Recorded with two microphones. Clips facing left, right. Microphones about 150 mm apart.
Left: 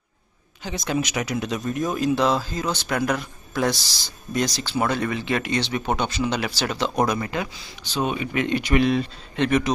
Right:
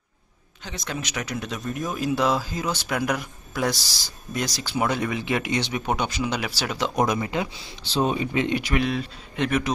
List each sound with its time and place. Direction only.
0.6 s speech: 10° left (ahead or behind); by 7.9 s 20° right (ahead or behind)
7.9 s speech: 30° right (ahead or behind)
8.5 s speech: centre (ahead or behind)